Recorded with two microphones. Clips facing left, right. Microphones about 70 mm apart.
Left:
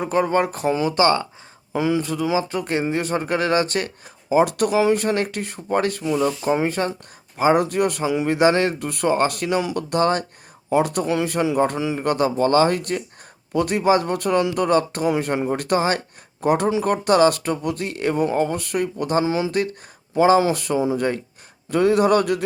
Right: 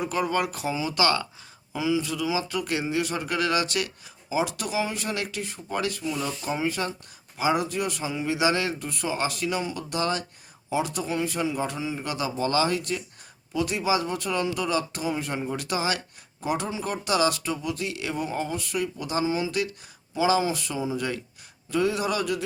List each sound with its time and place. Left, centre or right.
0.0 s a man's voice: left
1.7 s a man's voice: left
8.3 s speech: left
19.2 s speech: left
19.5 s speech: left